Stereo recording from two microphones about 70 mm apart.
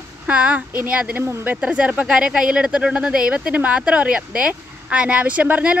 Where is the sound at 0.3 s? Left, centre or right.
Centre.